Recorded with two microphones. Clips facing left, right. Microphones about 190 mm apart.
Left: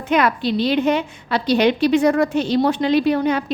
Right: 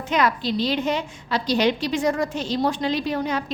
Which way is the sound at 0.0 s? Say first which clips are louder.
Left 4 dB; 60° left (ahead or behind).